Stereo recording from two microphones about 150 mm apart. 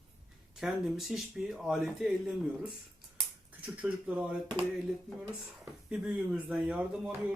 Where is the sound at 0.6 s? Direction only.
Centre (ahead or behind).